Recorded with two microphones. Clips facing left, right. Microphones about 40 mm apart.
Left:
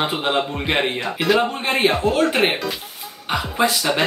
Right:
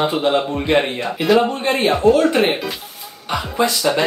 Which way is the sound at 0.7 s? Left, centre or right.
Left.